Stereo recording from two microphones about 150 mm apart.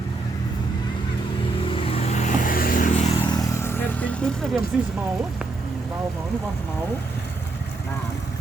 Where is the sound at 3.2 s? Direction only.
25° left (ahead or behind); by 4.6 s 5° left (ahead or behind).